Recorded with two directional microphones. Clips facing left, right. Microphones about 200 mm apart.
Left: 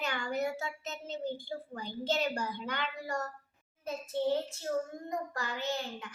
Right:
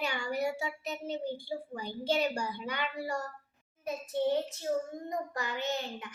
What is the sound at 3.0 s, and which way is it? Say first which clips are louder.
A woman's voice: right 1 dB; 10° right (ahead or behind).